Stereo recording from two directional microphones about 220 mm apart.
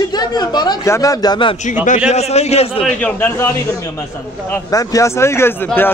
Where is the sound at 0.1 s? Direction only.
20° left (ahead or behind).